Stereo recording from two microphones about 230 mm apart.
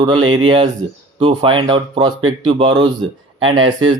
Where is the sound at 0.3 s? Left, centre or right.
Right.